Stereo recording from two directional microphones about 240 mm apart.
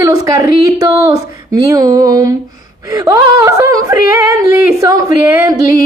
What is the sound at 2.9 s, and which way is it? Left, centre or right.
Speech, centre.